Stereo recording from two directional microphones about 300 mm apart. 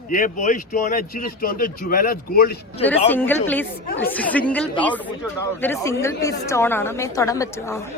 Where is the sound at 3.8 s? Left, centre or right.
Left.